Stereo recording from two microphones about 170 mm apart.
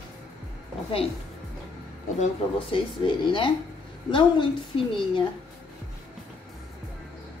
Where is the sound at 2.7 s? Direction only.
30° left (ahead or behind).